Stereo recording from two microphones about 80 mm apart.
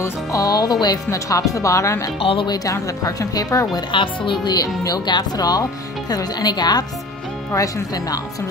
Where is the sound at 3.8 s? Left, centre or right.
Left.